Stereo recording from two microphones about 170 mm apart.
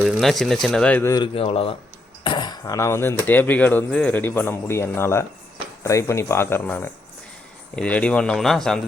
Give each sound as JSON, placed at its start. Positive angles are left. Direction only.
{"t": 0.0, "sound": "speech", "side_deg": 0}
{"t": 1.1, "sound": "a man's voice", "side_deg": 30}